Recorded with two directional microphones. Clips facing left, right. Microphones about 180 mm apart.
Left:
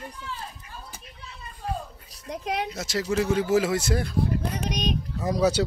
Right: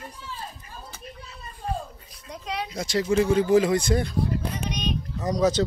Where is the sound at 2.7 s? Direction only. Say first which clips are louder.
Right 3 dB; 5° left (ahead or behind).